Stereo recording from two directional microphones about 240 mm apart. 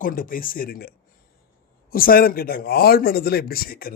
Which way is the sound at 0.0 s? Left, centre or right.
Left.